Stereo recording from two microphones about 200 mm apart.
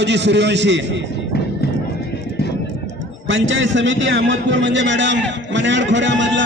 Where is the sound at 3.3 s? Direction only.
70° right (ahead or behind).